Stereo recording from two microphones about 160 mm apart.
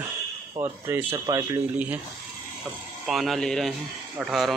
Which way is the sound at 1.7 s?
10° right (ahead or behind).